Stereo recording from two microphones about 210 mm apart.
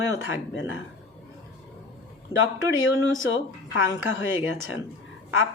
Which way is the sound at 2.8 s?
65° left (ahead or behind).